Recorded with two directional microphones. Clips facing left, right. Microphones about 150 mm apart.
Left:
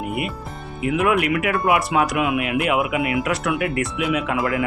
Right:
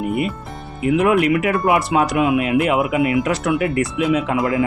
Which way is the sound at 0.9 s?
25° right (ahead or behind).